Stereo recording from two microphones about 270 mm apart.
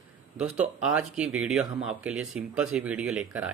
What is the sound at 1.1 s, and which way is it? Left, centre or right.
A man's voice, centre.